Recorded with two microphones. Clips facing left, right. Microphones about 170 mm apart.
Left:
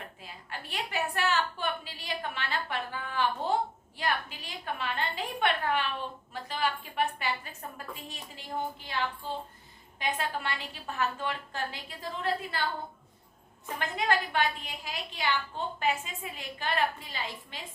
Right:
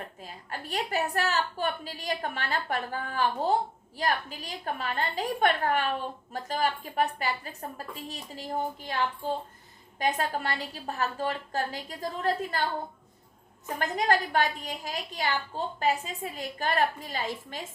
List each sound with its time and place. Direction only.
0.2 s a woman's voice: 45° right (ahead or behind)
13.7 s a woman's voice: 40° right (ahead or behind)